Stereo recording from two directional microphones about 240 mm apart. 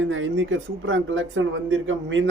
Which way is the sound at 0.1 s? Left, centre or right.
Right.